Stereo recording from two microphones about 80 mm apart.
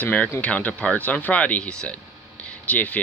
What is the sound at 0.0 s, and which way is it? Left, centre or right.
Speech, centre.